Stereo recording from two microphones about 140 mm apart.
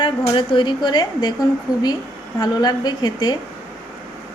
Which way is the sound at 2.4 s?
30° left (ahead or behind).